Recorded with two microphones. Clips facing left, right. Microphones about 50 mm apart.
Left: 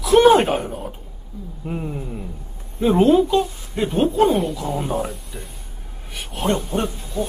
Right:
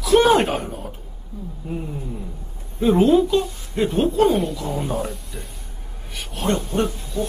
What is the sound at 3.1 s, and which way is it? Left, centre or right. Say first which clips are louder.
Speech: left 1 dB; centre.